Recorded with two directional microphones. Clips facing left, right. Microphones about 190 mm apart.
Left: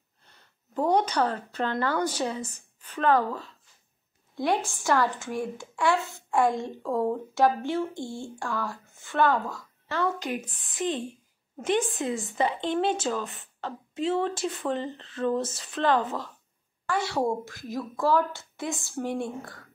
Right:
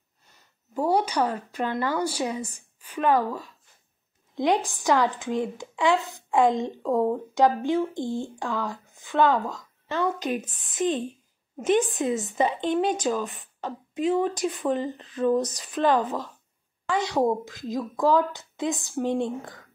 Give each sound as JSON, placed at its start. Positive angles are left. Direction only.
{"t": 0.2, "sound": "a woman's voice", "side_deg": -10}